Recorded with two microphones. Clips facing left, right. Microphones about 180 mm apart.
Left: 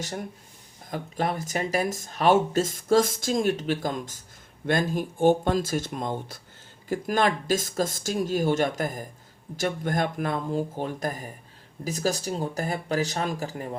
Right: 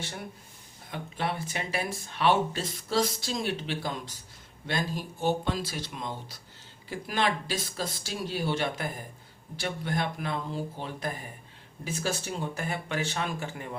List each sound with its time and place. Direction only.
0.9 s speech: 40° left (ahead or behind)